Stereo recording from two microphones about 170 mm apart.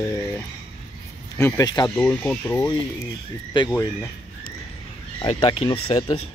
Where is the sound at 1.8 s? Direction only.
10° left (ahead or behind).